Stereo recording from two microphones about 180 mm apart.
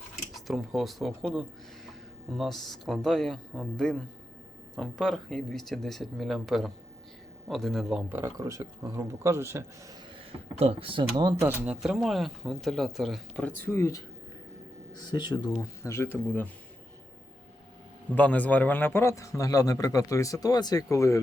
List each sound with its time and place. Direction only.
0.3 s speech: centre (ahead or behind)
8.2 s speech: 15° right (ahead or behind)
10.6 s speech: 35° right (ahead or behind)
11.6 s speech: 5° right (ahead or behind); by 14.0 s 15° left (ahead or behind)
15.0 s speech: 25° left (ahead or behind)
15.5 s a man's voice: 15° left (ahead or behind)
18.1 s a man's voice: 10° left (ahead or behind)